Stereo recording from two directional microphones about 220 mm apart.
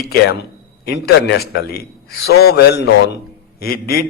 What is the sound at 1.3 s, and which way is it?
A man's voice, 50° left (ahead or behind).